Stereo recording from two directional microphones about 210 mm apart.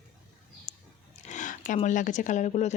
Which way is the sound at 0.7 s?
30° left (ahead or behind).